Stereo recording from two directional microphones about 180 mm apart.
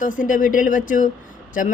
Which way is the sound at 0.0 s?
45° left (ahead or behind).